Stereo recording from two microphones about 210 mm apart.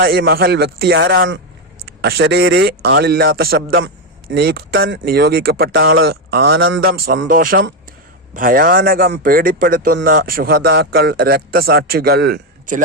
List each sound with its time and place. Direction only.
0.0 s speech: 45° right (ahead or behind)
3.8 s speech: 55° right (ahead or behind)